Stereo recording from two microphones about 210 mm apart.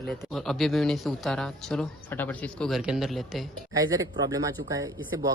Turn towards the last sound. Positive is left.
turn(degrees=-15)  # may be behind; listen again after turning